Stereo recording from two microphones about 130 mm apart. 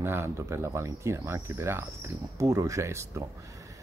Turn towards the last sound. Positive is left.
turn(degrees=-20)  # may be behind; listen again after turning